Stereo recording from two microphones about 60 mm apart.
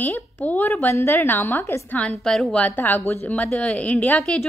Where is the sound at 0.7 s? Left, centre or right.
Left.